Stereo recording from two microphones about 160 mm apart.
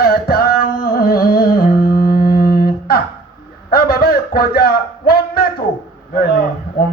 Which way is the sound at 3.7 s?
70° left (ahead or behind).